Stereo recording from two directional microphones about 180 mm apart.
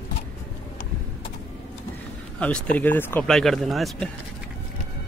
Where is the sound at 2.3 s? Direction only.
5° left (ahead or behind).